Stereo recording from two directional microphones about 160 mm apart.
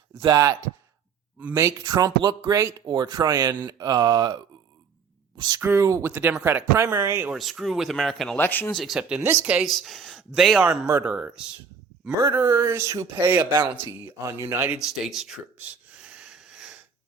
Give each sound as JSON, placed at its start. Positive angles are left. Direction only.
{"t": 0.1, "sound": "speech", "side_deg": -25}
{"t": 1.4, "sound": "speech", "side_deg": -15}
{"t": 5.5, "sound": "speech", "side_deg": -15}
{"t": 7.3, "sound": "speech", "side_deg": 0}
{"t": 8.4, "sound": "speech", "side_deg": 10}
{"t": 8.7, "sound": "speech", "side_deg": 0}
{"t": 14.9, "sound": "a sound", "side_deg": 0}